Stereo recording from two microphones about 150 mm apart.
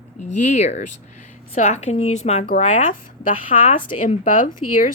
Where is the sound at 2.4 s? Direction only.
65° left (ahead or behind).